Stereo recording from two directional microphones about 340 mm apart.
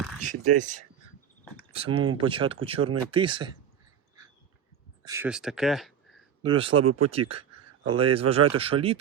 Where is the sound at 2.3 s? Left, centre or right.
Centre.